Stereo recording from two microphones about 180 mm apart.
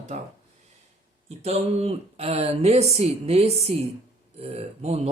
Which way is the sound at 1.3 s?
35° right (ahead or behind).